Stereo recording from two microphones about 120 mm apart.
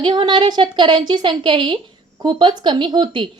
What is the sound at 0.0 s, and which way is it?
A woman's voice, 40° right (ahead or behind).